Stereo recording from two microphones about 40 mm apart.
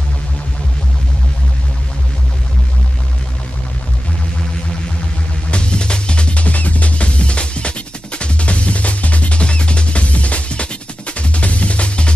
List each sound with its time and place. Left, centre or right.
5.5 s music: left